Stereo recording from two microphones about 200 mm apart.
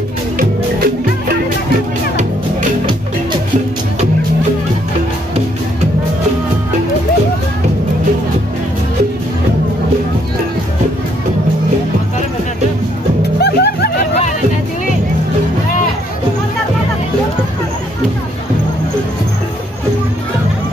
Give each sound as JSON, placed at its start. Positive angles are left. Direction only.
{"t": 0.4, "sound": "music", "side_deg": -45}
{"t": 13.4, "sound": "music", "side_deg": 55}